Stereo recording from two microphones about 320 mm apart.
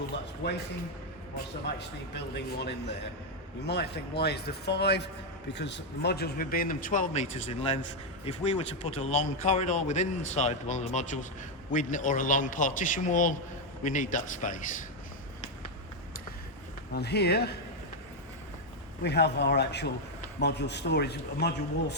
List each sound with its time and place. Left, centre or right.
0.4 s a man's voice: left
1.8 s a man's voice: left
16.9 s a man's voice: left
19.0 s a man's voice: left